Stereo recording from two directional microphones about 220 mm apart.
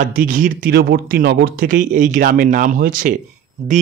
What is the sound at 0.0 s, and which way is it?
Speech, 40° right (ahead or behind).